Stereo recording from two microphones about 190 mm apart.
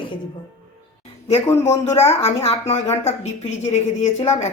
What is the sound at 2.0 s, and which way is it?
A woman's voice, 35° left (ahead or behind).